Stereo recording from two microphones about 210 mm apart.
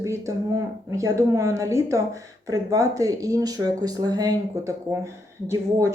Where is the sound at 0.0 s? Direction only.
15° right (ahead or behind).